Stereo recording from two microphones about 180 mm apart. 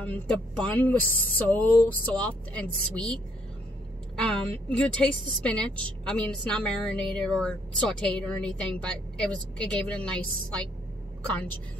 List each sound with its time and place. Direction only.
0.0 s speech: 5° left (ahead or behind)
4.2 s a woman's voice: 5° left (ahead or behind)